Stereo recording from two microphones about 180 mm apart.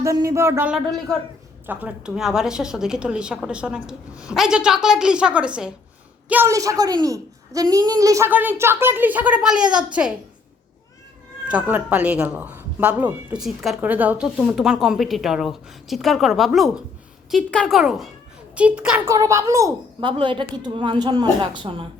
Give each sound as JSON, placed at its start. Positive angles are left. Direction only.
{"t": 0.0, "sound": "a woman's voice", "side_deg": -20}
{"t": 0.7, "sound": "a woman's voice", "side_deg": 0}
{"t": 11.4, "sound": "a woman's voice", "side_deg": -5}